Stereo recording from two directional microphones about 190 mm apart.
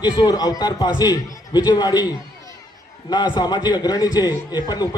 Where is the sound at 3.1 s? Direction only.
20° left (ahead or behind).